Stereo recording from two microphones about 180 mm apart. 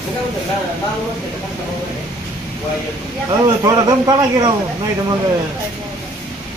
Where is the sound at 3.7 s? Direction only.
20° right (ahead or behind).